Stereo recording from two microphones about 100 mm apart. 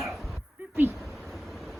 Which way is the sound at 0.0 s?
Centre (ahead or behind).